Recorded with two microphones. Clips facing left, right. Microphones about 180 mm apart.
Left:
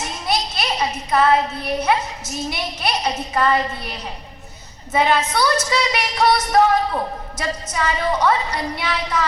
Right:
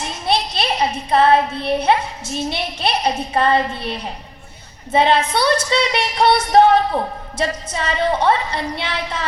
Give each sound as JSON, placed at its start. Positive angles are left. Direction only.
{"t": 0.3, "sound": "speech", "side_deg": -30}
{"t": 4.9, "sound": "music", "side_deg": -30}